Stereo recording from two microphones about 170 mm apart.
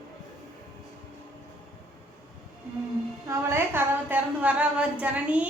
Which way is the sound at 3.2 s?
15° right (ahead or behind).